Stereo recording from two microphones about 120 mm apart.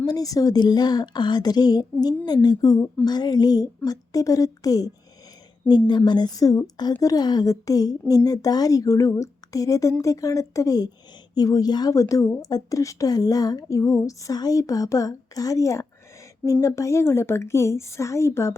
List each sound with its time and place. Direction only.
0.1 s speech: 30° left (ahead or behind)
6.1 s speech: 35° left (ahead or behind)